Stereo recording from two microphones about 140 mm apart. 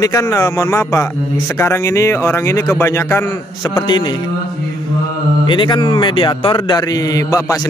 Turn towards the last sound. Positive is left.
turn(degrees=25)  # may be behind; listen again after turning